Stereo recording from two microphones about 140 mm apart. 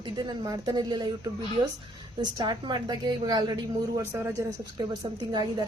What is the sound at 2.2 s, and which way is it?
A woman's voice, 30° right (ahead or behind).